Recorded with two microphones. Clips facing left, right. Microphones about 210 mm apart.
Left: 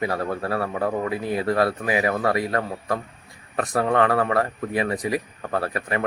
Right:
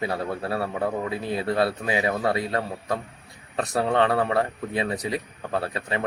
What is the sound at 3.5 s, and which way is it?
Speech, 25° right (ahead or behind).